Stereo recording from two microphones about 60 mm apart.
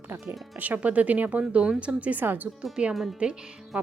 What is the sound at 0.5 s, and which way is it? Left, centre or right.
A woman's voice, right.